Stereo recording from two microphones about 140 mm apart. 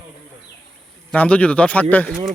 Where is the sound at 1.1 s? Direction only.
10° left (ahead or behind).